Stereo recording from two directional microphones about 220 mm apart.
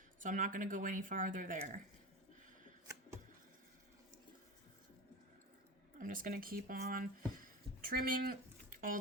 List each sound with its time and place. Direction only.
0.2 s speech: 35° right (ahead or behind)
6.0 s speech: 40° right (ahead or behind)